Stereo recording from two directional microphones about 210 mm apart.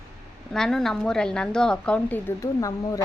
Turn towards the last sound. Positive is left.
turn(degrees=15)  # may be behind; listen again after turning